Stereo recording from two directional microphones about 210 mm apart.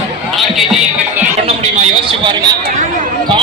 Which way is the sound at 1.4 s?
25° right (ahead or behind).